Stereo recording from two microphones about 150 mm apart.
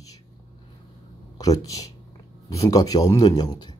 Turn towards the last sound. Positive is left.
turn(degrees=25)  # may be behind; listen again after turning